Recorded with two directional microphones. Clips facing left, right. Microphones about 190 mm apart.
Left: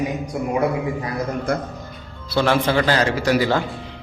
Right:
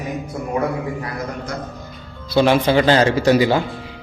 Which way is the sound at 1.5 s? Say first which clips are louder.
Left 6 dB; 55° left (ahead or behind).